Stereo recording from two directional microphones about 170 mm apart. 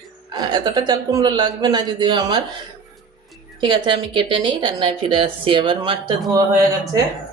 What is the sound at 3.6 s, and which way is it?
Speech, 30° right (ahead or behind).